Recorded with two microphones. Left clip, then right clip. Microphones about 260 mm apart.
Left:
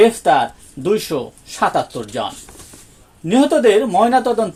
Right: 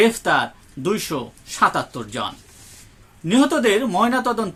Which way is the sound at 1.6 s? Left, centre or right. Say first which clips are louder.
Left 2 dB; centre.